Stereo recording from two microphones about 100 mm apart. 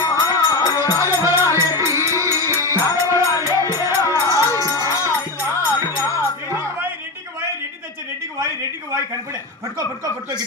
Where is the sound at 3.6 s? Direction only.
25° right (ahead or behind).